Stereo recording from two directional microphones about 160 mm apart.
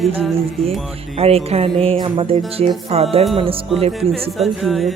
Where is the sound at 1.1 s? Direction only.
40° right (ahead or behind).